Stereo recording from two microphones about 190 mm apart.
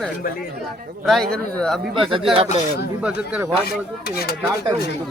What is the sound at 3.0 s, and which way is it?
Speech, 5° right (ahead or behind).